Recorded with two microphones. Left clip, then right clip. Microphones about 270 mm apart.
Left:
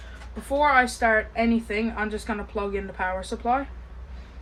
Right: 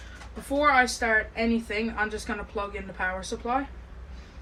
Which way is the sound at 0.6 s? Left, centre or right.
Left.